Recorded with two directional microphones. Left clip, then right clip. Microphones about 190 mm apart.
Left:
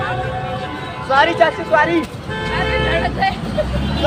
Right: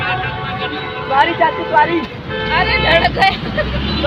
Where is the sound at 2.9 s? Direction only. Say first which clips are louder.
Right 6 dB; 35° right (ahead or behind).